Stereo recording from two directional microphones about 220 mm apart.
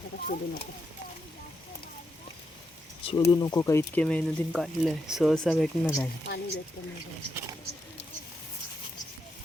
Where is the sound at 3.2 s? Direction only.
15° left (ahead or behind).